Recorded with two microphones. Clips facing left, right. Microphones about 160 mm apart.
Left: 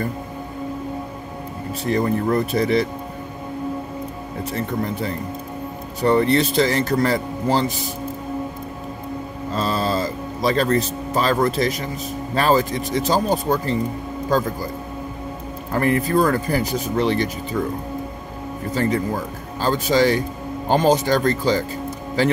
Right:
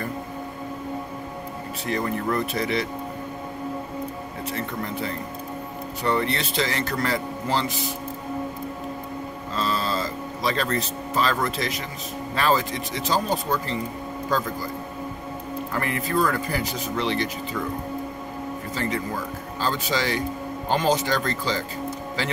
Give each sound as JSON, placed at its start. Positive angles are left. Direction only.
{"t": 1.9, "sound": "speech", "side_deg": 35}
{"t": 6.0, "sound": "speech", "side_deg": 40}
{"t": 9.6, "sound": "music", "side_deg": 40}
{"t": 12.4, "sound": "speech", "side_deg": 40}
{"t": 15.7, "sound": "speech", "side_deg": 40}
{"t": 18.8, "sound": "speech", "side_deg": 45}